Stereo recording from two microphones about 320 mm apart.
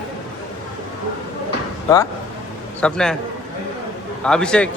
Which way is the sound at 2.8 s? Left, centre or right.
Centre.